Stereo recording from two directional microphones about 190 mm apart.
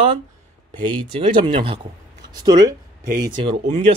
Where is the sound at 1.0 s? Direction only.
25° right (ahead or behind).